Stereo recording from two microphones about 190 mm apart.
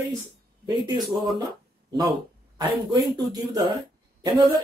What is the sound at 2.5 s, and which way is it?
Speech, 20° right (ahead or behind).